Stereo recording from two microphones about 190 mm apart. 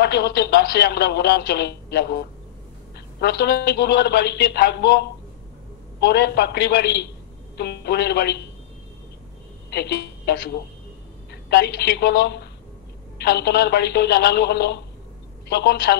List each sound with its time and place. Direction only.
0.0 s speech: 60° left (ahead or behind)
9.7 s a woman's voice: 60° left (ahead or behind)
11.5 s speech: 60° left (ahead or behind)